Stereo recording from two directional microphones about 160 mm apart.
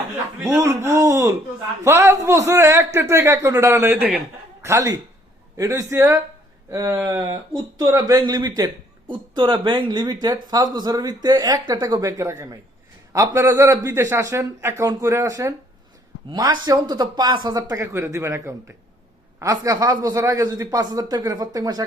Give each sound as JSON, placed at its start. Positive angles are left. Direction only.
{"t": 0.4, "sound": "a man's voice", "side_deg": -20}